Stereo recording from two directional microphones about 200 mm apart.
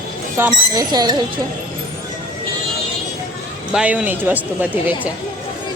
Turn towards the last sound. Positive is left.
turn(degrees=-10)  # may be behind; listen again after turning